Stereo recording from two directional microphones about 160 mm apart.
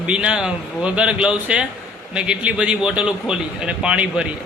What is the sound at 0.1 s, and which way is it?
A man's voice, 5° right (ahead or behind).